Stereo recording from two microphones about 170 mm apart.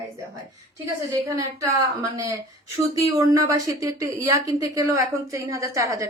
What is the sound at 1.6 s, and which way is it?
A woman's voice, 20° right (ahead or behind).